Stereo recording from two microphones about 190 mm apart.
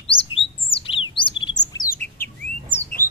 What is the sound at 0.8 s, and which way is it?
Bird, 25° left (ahead or behind).